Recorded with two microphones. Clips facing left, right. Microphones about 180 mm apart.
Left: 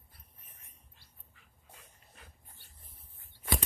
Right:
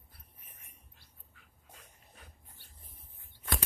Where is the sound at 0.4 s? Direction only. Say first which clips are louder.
Right 2 dB; 10° right (ahead or behind).